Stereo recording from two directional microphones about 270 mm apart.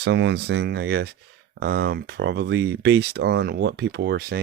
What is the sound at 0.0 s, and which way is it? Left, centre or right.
Speech, right.